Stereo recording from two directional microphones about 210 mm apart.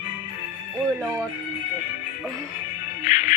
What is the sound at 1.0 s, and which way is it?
Speech, 15° right (ahead or behind).